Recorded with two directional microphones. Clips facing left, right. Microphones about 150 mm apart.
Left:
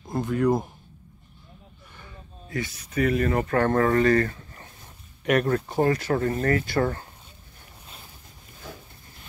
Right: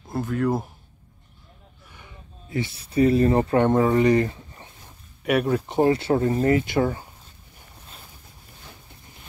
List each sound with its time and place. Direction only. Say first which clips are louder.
0.1 s speech: left 1 dB; centre (ahead or behind)
2.0 s a sound: left 2 dB; 15° right (ahead or behind)
2.6 s speech: right 5 dB; 30° right (ahead or behind)
5.2 s speech: right 1 dB; 5° right (ahead or behind)
5.7 s speech: right 3 dB; 25° right (ahead or behind)
6.8 s speech: right 2 dB; 5° right (ahead or behind)